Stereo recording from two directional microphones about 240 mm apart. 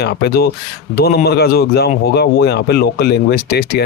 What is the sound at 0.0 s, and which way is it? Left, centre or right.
Speech, left.